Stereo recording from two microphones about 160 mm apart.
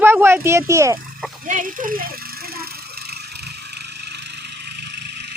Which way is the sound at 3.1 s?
90° right.